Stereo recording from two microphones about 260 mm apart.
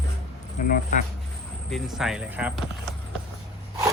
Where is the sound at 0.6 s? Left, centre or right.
Left.